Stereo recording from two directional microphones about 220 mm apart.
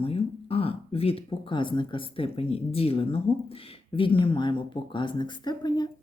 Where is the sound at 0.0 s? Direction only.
25° left (ahead or behind).